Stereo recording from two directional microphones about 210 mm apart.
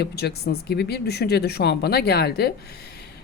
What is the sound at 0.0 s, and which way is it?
A woman's voice, 50° left (ahead or behind).